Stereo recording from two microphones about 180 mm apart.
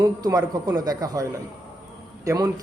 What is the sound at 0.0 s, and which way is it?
Speech, 20° right (ahead or behind).